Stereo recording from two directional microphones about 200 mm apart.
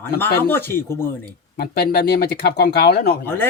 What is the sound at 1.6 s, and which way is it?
Speech, 50° left (ahead or behind).